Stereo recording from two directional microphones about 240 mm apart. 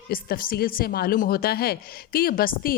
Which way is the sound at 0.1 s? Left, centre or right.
Left.